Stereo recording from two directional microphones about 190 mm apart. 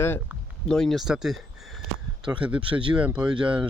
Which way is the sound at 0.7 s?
Centre (ahead or behind).